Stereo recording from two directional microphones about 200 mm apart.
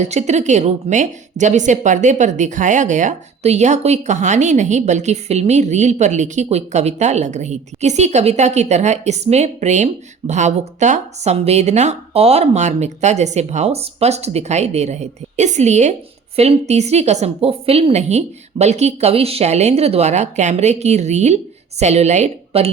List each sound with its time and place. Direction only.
0.0 s a woman's voice: 35° right (ahead or behind)